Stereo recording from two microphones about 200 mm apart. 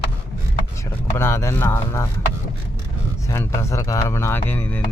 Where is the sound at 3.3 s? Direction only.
15° left (ahead or behind).